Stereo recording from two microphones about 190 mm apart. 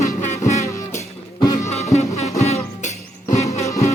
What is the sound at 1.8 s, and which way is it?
Music, 35° left (ahead or behind).